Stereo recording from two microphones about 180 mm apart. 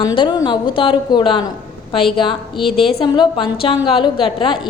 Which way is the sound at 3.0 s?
25° left (ahead or behind).